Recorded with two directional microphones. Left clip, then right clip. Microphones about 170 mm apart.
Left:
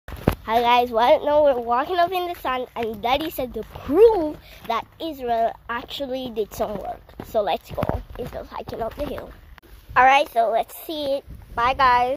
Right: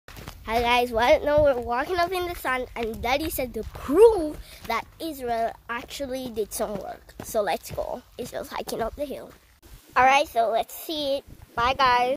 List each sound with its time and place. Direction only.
0.3 s speech: 10° right (ahead or behind)
8.4 s speech: 45° right (ahead or behind)
9.9 s speech: 5° right (ahead or behind)